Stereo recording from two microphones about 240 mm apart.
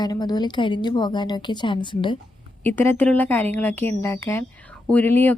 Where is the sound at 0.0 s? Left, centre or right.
Centre.